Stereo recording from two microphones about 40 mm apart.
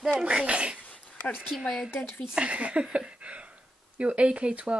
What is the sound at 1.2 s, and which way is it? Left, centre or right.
Speech, left.